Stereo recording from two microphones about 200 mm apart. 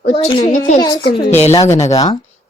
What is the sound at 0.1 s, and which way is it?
Speech, 25° left (ahead or behind).